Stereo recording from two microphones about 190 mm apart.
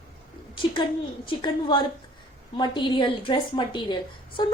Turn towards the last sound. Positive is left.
turn(degrees=25)  # may be behind; listen again after turning